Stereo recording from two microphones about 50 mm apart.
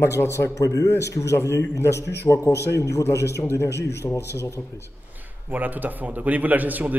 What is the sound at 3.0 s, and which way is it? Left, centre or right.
A man's voice, left.